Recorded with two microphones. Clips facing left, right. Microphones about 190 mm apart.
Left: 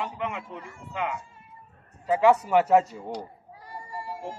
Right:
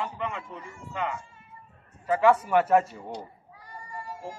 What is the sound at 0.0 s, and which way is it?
A man's voice, 15° left (ahead or behind).